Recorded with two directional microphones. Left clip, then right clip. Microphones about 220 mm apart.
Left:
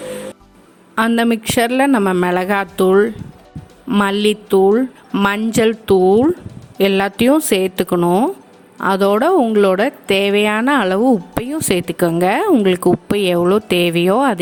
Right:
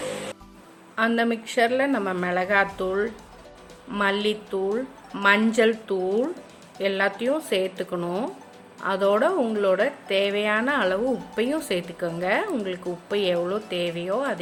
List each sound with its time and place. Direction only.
0.9 s speech: 50° left (ahead or behind)